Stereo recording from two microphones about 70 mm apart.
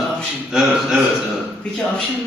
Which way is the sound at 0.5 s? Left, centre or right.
Centre.